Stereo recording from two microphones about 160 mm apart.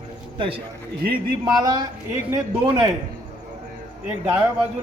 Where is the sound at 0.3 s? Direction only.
35° right (ahead or behind).